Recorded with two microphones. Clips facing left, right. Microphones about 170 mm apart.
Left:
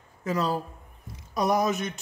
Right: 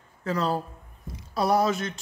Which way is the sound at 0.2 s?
20° left (ahead or behind).